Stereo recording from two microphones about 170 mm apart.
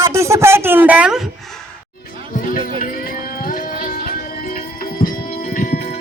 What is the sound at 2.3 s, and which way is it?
Music, 55° left (ahead or behind).